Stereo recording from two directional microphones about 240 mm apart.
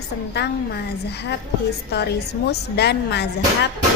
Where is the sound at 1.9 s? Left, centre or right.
Left.